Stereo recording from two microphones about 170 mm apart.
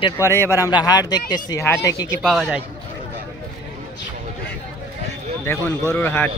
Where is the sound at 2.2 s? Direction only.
Centre (ahead or behind).